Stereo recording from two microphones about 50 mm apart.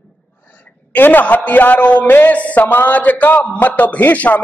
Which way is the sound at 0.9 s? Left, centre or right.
Left.